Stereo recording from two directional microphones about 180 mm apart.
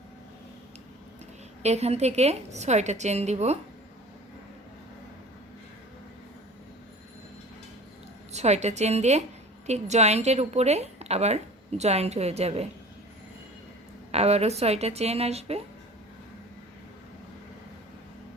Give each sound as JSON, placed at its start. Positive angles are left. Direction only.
{"t": 1.6, "sound": "a woman's voice", "side_deg": -35}
{"t": 8.3, "sound": "a woman's voice", "side_deg": -40}
{"t": 14.1, "sound": "a woman's voice", "side_deg": -35}